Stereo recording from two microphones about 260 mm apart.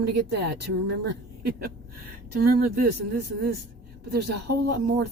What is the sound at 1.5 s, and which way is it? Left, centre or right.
Speech, right.